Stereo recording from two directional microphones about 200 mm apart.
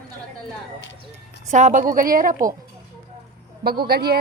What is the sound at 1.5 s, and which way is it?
Speech, 35° right (ahead or behind).